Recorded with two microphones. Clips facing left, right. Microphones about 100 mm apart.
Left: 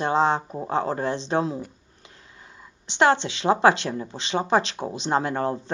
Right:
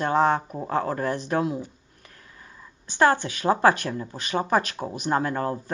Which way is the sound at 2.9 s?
25° left (ahead or behind).